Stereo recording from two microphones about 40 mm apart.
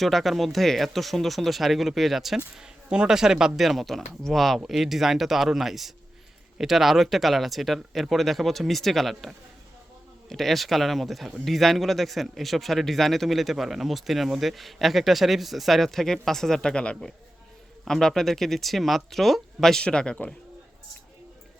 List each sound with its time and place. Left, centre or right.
0.0 s speech: centre
2.6 s speech: centre
4.6 s speech: centre
16.6 s speech: left
17.8 s speech: centre
19.8 s speech: left